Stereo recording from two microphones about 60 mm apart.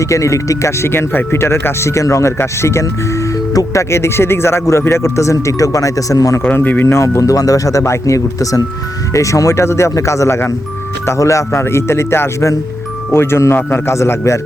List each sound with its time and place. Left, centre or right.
0.0 s speech: left
0.9 s speech: left
3.5 s speech: left
3.9 s speech: left
6.4 s speech: left
6.8 s speech: left
11.0 s speech: left
11.6 s speech: left